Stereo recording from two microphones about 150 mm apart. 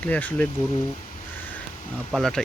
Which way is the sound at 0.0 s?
10° left (ahead or behind).